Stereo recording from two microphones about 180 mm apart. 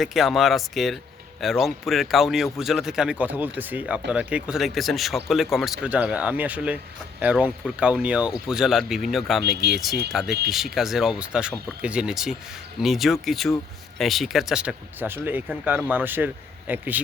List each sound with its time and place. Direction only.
0.0 s speech: centre (ahead or behind)
9.6 s speech: 65° right (ahead or behind)
10.1 s speech: centre (ahead or behind)